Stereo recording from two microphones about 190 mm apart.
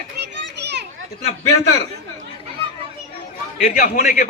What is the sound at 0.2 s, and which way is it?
Children playing, 65° right (ahead or behind).